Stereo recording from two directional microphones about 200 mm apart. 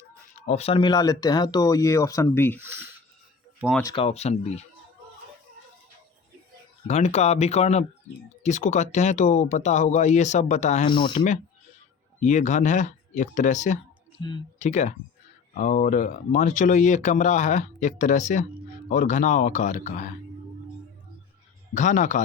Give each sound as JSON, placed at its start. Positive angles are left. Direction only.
{"t": 0.3, "sound": "speech", "side_deg": 35}
{"t": 2.6, "sound": "speech", "side_deg": -10}
{"t": 3.9, "sound": "speech", "side_deg": 30}
{"t": 6.8, "sound": "speech", "side_deg": 35}
{"t": 11.1, "sound": "speech", "side_deg": 45}
{"t": 14.2, "sound": "speech", "side_deg": 20}
{"t": 14.6, "sound": "speech", "side_deg": 35}
{"t": 21.8, "sound": "speech", "side_deg": 35}